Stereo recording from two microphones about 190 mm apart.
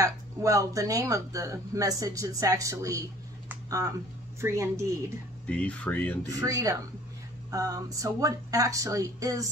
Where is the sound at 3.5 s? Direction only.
20° right (ahead or behind).